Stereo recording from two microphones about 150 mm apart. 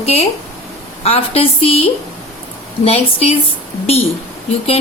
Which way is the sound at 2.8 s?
40° left (ahead or behind).